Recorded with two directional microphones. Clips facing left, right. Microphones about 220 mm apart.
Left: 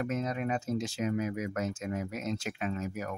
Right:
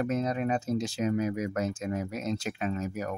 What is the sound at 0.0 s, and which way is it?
Speech, 35° right (ahead or behind).